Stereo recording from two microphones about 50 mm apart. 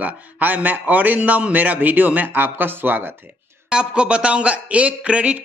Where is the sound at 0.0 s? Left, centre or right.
Right.